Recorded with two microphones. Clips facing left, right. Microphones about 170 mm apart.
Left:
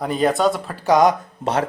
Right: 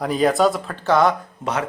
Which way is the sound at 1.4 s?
30° left (ahead or behind).